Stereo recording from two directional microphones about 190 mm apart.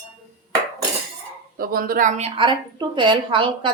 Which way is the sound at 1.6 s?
50° right (ahead or behind).